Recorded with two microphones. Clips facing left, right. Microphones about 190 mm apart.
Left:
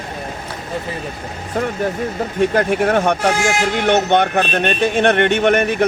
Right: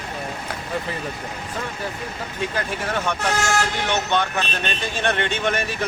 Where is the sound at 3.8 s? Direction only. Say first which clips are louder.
Left 8 dB; 60° left (ahead or behind).